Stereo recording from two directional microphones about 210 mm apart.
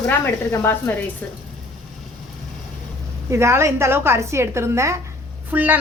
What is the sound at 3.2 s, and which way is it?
A woman's voice, 15° right (ahead or behind).